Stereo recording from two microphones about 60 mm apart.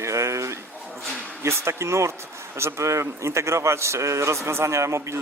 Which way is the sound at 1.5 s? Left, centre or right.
Right.